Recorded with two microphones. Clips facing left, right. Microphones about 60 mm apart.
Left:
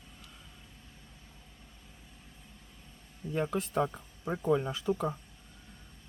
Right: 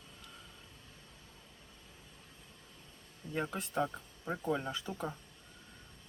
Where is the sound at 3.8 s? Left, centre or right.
Centre.